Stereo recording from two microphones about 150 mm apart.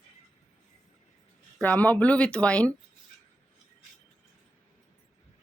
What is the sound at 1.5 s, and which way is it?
Speech, 10° left (ahead or behind).